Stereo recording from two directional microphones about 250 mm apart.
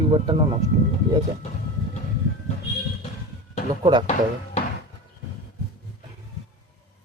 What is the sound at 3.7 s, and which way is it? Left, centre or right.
Speech, centre.